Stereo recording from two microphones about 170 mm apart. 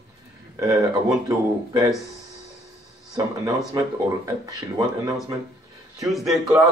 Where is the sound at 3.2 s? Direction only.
20° right (ahead or behind).